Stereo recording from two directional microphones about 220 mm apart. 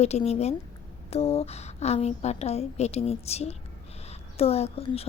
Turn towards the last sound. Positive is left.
turn(degrees=25)  # may be behind; listen again after turning